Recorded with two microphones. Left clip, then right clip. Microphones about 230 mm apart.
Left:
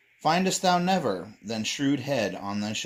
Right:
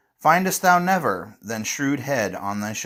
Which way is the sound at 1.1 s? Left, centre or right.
Centre.